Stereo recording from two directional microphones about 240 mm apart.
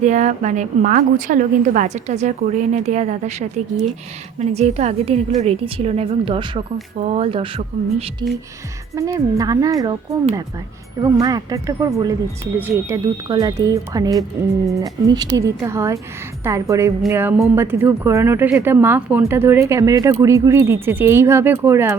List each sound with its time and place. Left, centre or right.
0.0 s a woman's voice: right
4.4 s a woman's voice: right
11.0 s speech: centre